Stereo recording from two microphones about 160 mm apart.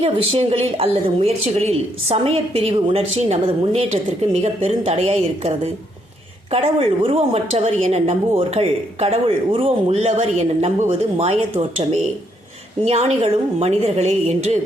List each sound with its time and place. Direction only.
0.0 s a woman's voice: 35° right (ahead or behind)